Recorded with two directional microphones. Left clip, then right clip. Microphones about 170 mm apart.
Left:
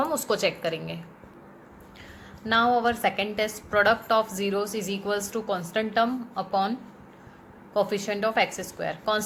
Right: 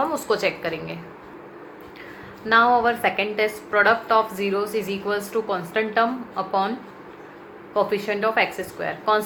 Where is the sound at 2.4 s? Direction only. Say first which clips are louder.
Right 5 dB; 40° left (ahead or behind).